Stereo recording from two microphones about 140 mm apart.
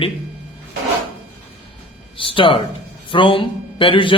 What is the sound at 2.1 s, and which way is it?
Speech, 40° left (ahead or behind).